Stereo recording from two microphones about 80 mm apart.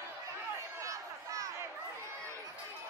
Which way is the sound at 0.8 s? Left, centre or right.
Right.